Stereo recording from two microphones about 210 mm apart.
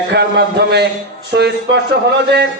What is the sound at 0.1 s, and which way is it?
A man's voice, 50° right (ahead or behind).